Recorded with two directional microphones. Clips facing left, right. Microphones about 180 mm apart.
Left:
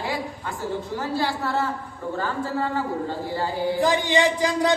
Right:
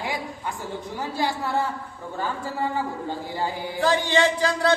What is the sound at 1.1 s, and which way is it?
Speech, 15° right (ahead or behind).